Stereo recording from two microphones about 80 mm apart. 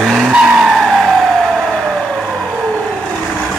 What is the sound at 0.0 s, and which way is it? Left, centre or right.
Skidding, centre.